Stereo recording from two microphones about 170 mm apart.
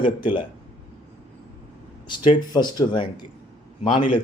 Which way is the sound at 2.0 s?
30° left (ahead or behind).